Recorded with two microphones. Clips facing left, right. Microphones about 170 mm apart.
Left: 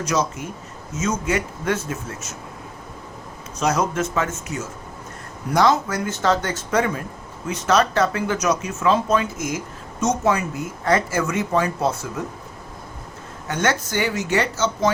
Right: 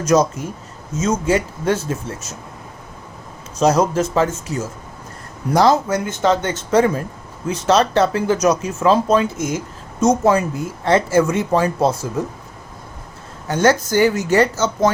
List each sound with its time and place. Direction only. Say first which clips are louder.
0.0 s a man's voice: right 7 dB; 40° right (ahead or behind)
0.9 s speech: right 5 dB; 30° right (ahead or behind)
3.6 s speech: right 6 dB; 35° right (ahead or behind)
6.1 s speech: right 2 dB; 20° right (ahead or behind)
13.5 s speech: right 7 dB; 35° right (ahead or behind)